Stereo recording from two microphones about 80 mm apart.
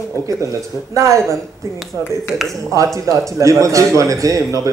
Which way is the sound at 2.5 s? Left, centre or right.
Right.